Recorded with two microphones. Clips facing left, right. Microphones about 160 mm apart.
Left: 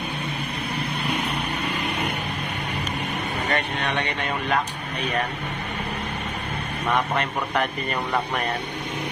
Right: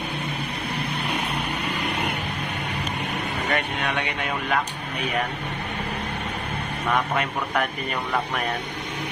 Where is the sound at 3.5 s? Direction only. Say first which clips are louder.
Even; 5° right (ahead or behind).